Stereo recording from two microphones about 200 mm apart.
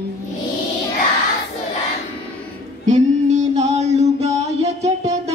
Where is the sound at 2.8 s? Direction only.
35° right (ahead or behind).